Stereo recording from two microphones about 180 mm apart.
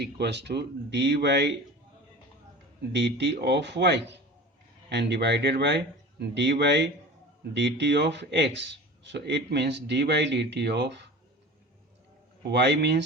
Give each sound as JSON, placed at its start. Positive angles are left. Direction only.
{"t": 0.0, "sound": "speech", "side_deg": -70}
{"t": 2.9, "sound": "speech", "side_deg": -70}
{"t": 12.5, "sound": "speech", "side_deg": -70}